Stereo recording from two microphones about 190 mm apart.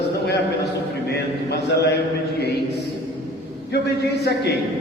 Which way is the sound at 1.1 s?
60° left (ahead or behind).